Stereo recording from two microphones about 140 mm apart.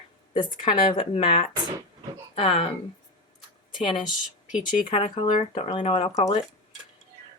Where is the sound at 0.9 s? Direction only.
45° left (ahead or behind).